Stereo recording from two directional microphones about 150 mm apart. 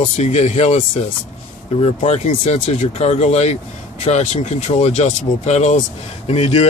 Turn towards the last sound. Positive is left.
turn(degrees=45)  # may be behind; listen again after turning